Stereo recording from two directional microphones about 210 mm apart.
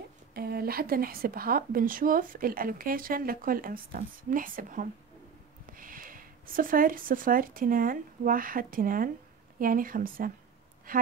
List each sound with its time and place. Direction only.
0.3 s a woman's voice: 50° right (ahead or behind)